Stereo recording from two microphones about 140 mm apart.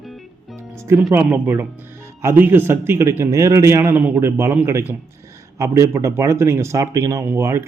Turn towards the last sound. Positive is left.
turn(degrees=-15)  # may be behind; listen again after turning